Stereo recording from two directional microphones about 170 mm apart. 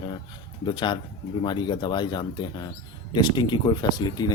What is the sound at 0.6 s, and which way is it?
Speech, 25° left (ahead or behind).